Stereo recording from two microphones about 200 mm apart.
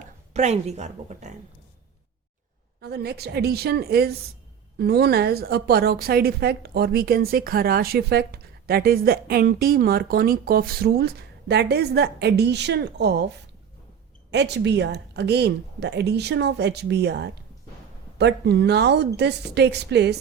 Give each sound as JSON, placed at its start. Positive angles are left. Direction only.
{"t": 0.3, "sound": "speech", "side_deg": -35}
{"t": 2.8, "sound": "a woman's voice", "side_deg": -55}